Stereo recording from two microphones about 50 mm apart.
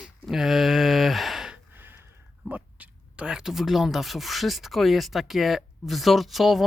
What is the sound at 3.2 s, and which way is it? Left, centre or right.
Speech, centre.